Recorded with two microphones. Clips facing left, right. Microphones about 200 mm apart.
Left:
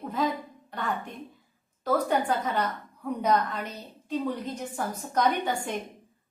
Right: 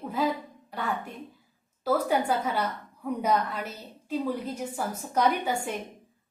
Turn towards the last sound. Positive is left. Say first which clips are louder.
# even
turn(degrees=-10)  # may be behind; listen again after turning